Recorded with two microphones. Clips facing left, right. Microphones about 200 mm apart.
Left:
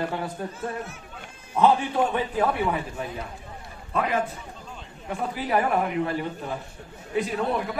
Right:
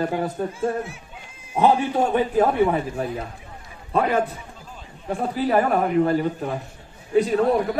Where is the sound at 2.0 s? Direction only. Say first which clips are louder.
Right 5 dB; 40° right (ahead or behind).